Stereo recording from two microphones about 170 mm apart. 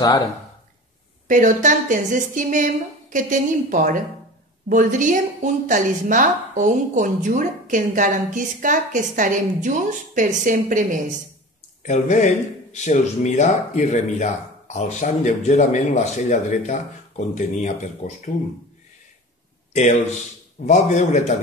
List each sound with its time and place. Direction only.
1.2 s a woman's voice: 50° right (ahead or behind)
11.8 s speech: 45° left (ahead or behind)
19.7 s speech: 45° left (ahead or behind)